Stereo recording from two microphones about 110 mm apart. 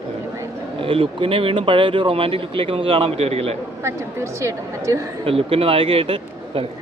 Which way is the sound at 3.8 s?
25° right (ahead or behind).